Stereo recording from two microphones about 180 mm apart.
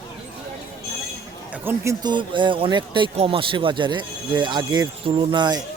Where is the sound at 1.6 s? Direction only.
15° right (ahead or behind).